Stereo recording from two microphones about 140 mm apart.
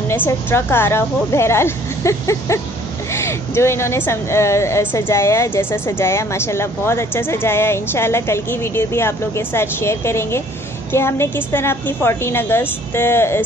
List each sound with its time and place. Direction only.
0.1 s a woman's voice: 15° left (ahead or behind)